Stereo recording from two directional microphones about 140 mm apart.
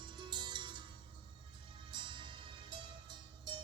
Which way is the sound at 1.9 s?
35° right (ahead or behind).